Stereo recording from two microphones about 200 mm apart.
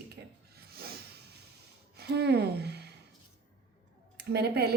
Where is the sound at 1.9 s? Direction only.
55° right (ahead or behind).